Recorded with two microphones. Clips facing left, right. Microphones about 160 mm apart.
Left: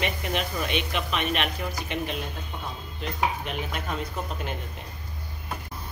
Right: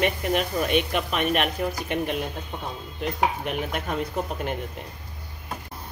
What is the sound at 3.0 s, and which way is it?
Dishes, 60° right (ahead or behind).